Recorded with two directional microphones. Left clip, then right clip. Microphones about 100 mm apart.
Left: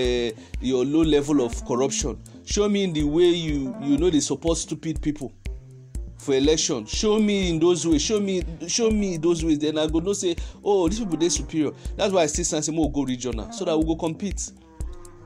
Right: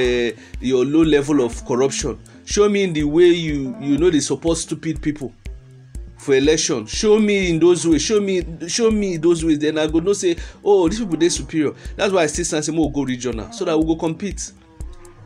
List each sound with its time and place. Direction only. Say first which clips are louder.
0.0 s a man's voice: right 5 dB; 50° left (ahead or behind)
6.2 s a man's voice: right 5 dB; 50° left (ahead or behind)